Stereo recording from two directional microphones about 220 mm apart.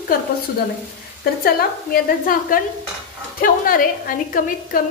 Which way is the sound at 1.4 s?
40° left (ahead or behind).